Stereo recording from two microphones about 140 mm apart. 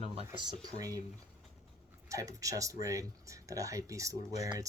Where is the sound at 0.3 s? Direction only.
30° right (ahead or behind).